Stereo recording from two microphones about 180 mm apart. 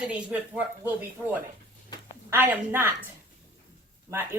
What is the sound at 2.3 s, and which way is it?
Speech, 10° right (ahead or behind).